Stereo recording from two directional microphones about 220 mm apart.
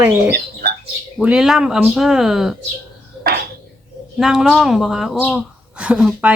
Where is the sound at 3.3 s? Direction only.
45° right (ahead or behind).